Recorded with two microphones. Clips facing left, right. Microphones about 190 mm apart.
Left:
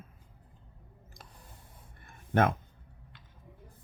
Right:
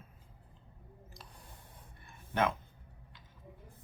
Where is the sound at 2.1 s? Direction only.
50° left (ahead or behind).